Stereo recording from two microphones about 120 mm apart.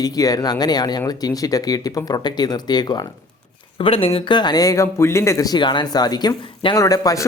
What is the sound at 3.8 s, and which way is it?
Speech, 50° left (ahead or behind).